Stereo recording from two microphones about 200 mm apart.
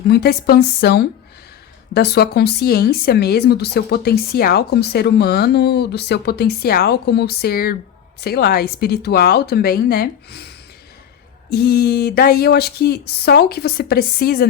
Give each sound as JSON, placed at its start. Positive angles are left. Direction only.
{"t": 0.1, "sound": "speech", "side_deg": 50}
{"t": 11.5, "sound": "speech", "side_deg": 50}